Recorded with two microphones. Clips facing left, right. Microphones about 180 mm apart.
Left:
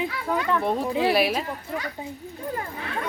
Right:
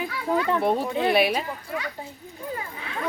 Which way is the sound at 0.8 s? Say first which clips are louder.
Even; 5° left (ahead or behind).